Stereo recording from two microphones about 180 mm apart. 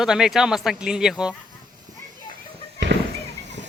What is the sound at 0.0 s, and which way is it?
Speech, centre (ahead or behind).